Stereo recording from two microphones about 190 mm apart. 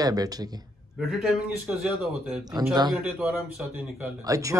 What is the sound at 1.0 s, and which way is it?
A man's voice, centre (ahead or behind).